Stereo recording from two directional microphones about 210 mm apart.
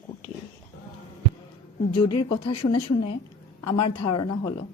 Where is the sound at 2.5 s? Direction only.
25° left (ahead or behind).